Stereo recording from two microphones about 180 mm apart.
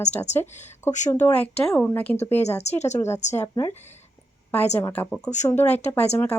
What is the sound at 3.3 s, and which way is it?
Speech, 15° left (ahead or behind).